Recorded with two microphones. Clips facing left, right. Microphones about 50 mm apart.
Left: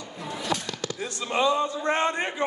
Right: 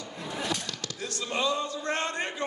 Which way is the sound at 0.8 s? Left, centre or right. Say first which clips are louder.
Left 5 dB; centre.